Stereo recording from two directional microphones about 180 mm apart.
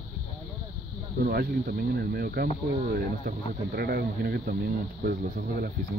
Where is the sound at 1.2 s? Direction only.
50° right (ahead or behind).